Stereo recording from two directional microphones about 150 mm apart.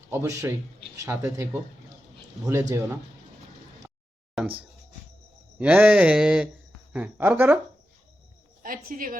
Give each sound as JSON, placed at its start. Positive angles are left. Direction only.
{"t": 0.1, "sound": "speech", "side_deg": -20}
{"t": 5.5, "sound": "speech", "side_deg": -10}
{"t": 8.6, "sound": "speech", "side_deg": -70}